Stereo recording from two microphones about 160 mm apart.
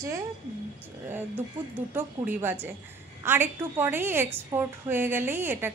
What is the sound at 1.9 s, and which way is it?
A woman's voice, 10° right (ahead or behind).